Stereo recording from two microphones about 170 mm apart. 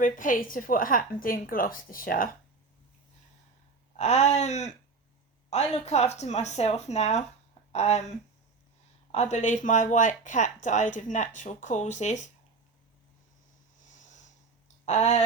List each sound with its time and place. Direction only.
0.0 s a woman's voice: 50° left (ahead or behind)
3.9 s speech: 40° left (ahead or behind)
9.1 s speech: 40° left (ahead or behind)
14.8 s speech: 40° left (ahead or behind)